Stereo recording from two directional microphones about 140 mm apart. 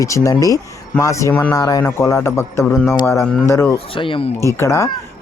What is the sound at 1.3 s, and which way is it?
Speech, 10° left (ahead or behind).